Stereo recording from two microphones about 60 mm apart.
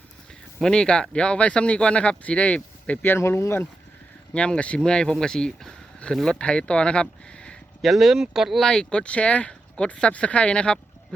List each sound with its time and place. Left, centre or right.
0.6 s speech: centre
3.2 s speech: left
4.4 s speech: centre
7.8 s speech: centre
8.6 s speech: centre